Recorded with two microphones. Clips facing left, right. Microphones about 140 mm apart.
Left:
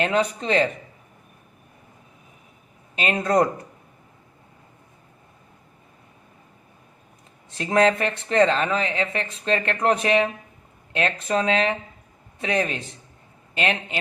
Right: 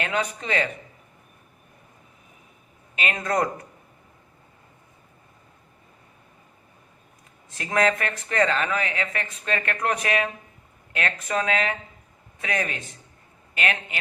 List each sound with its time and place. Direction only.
0.0 s speech: 30° left (ahead or behind)
2.9 s speech: 30° left (ahead or behind)
7.5 s speech: 30° left (ahead or behind)